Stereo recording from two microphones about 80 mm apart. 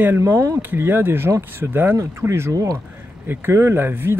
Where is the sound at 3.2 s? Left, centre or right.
Right.